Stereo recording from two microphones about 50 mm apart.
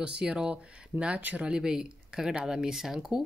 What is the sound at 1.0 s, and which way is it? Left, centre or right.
Speech, right.